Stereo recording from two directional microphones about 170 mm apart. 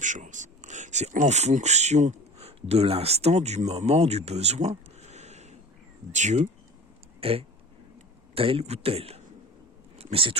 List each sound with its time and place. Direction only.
0.0 s speech: 45° right (ahead or behind)
7.2 s a man's voice: 35° right (ahead or behind)